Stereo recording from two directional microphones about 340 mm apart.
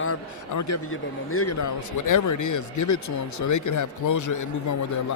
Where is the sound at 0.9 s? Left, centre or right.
Left.